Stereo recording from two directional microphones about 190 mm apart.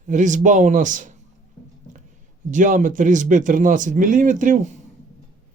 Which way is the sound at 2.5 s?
40° right (ahead or behind).